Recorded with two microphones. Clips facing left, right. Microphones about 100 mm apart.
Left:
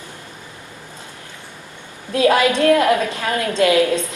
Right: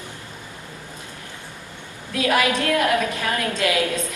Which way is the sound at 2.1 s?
30° left (ahead or behind).